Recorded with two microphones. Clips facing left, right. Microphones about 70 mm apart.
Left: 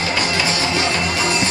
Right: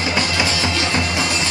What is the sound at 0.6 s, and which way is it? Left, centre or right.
Music, left.